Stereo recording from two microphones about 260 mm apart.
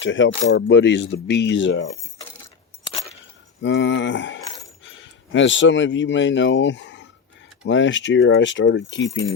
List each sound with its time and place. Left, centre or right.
0.0 s speech: left
3.6 s speech: left